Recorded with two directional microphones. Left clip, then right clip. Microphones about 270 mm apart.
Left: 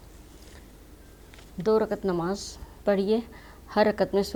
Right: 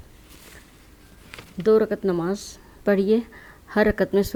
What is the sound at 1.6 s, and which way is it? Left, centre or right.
Speech, right.